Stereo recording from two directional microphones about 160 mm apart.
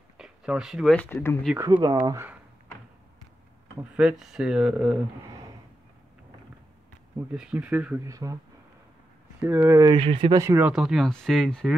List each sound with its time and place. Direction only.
0.2 s a sound: 5° right (ahead or behind)
0.9 s speech: 10° left (ahead or behind)
1.7 s speech: 30° right (ahead or behind)
3.9 s speech: 5° right (ahead or behind)
7.3 s speech: 10° right (ahead or behind)
8.0 s speech: 20° right (ahead or behind)
9.4 s speech: 15° right (ahead or behind); by 10.3 s 35° right (ahead or behind)
10.3 s speech: 15° right (ahead or behind)
10.7 s speech: 5° right (ahead or behind)